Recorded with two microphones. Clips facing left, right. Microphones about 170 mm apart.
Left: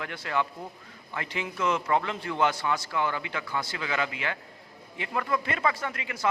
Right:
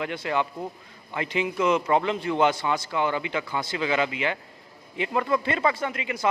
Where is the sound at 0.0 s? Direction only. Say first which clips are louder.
Right 4 dB; 20° right (ahead or behind).